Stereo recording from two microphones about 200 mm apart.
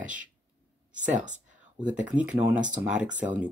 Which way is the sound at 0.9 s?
40° right (ahead or behind).